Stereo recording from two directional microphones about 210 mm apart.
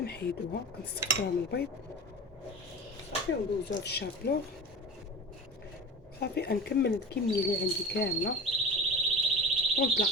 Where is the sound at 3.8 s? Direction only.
50° left (ahead or behind).